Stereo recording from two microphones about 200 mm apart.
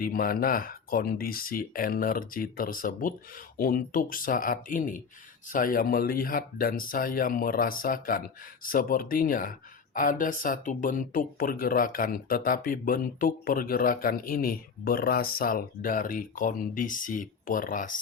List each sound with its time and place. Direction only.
0.0 s speech: 45° left (ahead or behind)